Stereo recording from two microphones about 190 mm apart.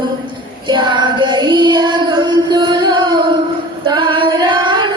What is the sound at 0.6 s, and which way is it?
Child singing, 25° right (ahead or behind).